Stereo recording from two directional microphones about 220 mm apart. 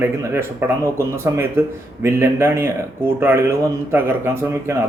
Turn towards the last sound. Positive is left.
turn(degrees=-10)  # may be behind; listen again after turning